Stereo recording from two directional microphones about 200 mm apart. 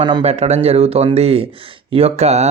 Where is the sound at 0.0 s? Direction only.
30° right (ahead or behind).